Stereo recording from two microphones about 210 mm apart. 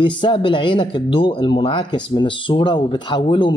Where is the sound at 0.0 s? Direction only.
25° left (ahead or behind).